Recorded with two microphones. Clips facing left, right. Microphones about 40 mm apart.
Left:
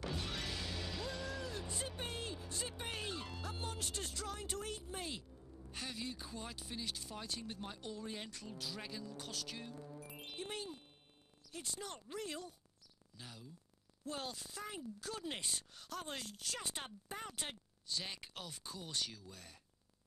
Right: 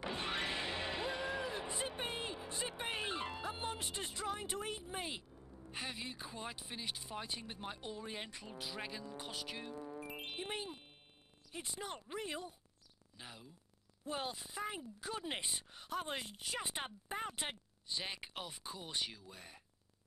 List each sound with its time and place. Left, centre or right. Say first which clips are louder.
0.0 s music: right 4 dB; right
5.7 s speech: right 1 dB; right
9.8 s music: right 5 dB; right
11.5 s speech: right 2 dB; right